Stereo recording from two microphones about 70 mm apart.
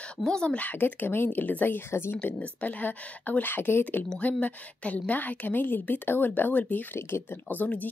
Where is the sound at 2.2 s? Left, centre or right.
Left.